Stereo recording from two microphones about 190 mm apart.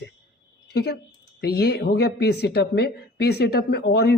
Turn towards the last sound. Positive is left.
turn(degrees=60)  # may be behind; listen again after turning